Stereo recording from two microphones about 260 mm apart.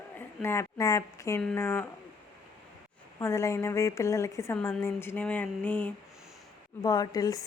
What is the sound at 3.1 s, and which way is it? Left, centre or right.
Speech, centre.